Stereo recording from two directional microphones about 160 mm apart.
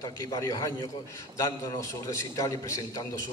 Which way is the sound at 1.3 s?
20° left (ahead or behind).